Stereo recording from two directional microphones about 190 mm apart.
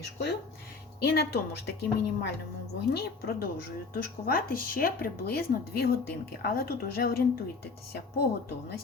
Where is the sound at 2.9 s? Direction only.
55° left (ahead or behind).